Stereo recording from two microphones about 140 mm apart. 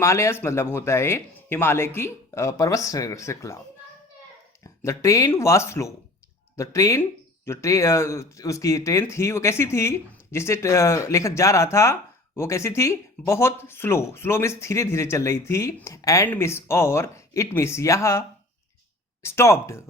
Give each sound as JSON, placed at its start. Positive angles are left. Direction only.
{"t": 0.0, "sound": "speech", "side_deg": 20}
{"t": 4.6, "sound": "speech", "side_deg": 20}